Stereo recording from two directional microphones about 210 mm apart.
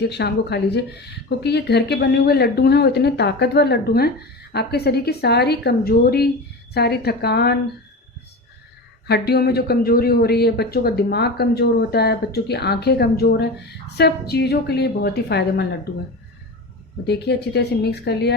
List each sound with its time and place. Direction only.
0.1 s speech: 55° left (ahead or behind)
9.0 s speech: 50° left (ahead or behind)
17.1 s speech: 50° left (ahead or behind)